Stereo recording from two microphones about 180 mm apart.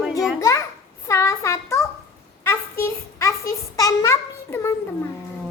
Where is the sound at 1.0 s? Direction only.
15° left (ahead or behind).